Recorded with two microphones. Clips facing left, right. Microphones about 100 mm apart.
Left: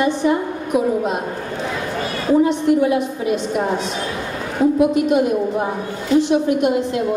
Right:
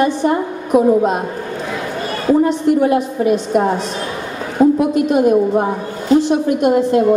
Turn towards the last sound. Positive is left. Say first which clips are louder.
# right 4 dB
turn(degrees=-45)  # may be behind; listen again after turning